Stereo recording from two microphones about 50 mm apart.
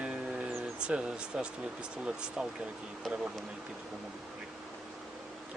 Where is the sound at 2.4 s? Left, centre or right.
Centre.